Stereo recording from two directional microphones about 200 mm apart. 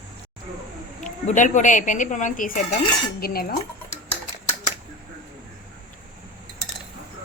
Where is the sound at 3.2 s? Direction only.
50° left (ahead or behind).